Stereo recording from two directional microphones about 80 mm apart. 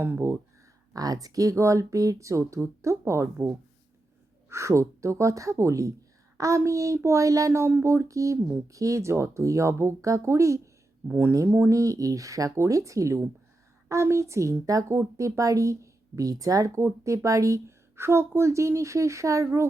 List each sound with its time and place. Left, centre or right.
0.0 s speech: right
0.9 s speech: right
11.7 s speech: right